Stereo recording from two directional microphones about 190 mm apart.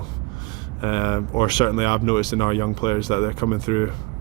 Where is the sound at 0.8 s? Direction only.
25° left (ahead or behind).